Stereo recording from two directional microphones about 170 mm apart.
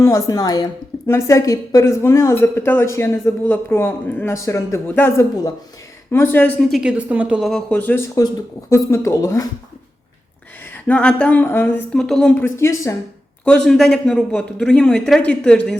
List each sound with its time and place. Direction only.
0.0 s a woman's voice: 20° left (ahead or behind)
10.8 s a woman's voice: 5° left (ahead or behind)
11.9 s a woman's voice: 5° left (ahead or behind)
13.4 s a man's voice: 5° left (ahead or behind)